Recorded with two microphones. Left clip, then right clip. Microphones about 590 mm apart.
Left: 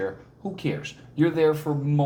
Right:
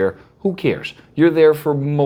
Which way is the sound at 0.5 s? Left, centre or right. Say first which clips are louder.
Right 6 dB; right.